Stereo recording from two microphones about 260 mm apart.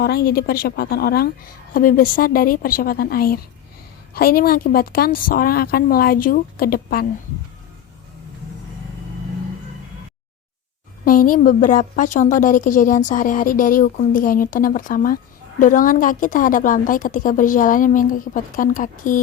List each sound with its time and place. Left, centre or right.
0.0 s a woman's voice: left
11.0 s a woman's voice: left